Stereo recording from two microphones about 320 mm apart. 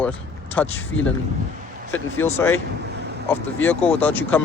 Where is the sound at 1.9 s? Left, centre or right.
Centre.